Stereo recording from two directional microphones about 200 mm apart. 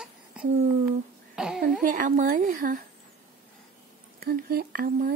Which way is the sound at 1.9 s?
40° right (ahead or behind).